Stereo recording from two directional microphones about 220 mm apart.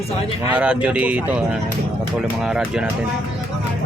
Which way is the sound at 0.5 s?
5° right (ahead or behind).